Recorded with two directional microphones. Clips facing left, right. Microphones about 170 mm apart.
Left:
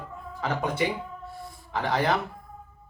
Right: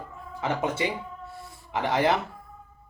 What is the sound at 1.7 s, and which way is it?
Speech, 25° right (ahead or behind).